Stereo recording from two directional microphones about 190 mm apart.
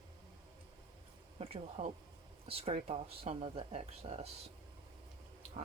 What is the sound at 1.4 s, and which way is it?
Speech, 30° right (ahead or behind).